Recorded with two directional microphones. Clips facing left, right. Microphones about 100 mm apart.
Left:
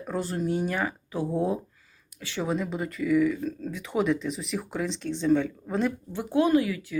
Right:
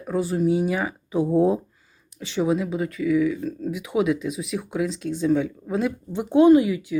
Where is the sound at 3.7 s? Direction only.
10° right (ahead or behind).